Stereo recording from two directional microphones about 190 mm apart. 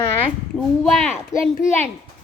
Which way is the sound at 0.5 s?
5° left (ahead or behind).